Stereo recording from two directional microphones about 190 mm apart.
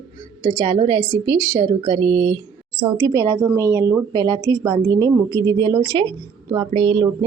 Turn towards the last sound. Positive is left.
turn(degrees=-25)  # may be behind; listen again after turning